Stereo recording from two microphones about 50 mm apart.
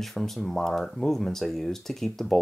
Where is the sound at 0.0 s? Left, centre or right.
Centre.